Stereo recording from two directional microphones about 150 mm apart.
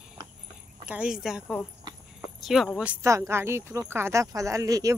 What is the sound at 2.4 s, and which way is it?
Speech, centre (ahead or behind).